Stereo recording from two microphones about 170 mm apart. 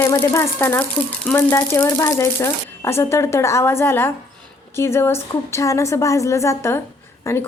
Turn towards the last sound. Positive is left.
turn(degrees=15)  # may be behind; listen again after turning